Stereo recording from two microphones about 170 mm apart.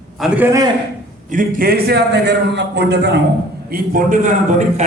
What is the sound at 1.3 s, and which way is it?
A man's voice, 50° right (ahead or behind).